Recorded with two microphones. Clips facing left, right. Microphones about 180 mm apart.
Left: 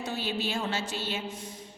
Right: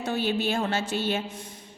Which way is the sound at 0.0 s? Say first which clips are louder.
Right 6 dB; 55° right (ahead or behind).